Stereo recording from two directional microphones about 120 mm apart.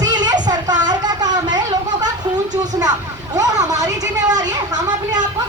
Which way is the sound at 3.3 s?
30° right (ahead or behind).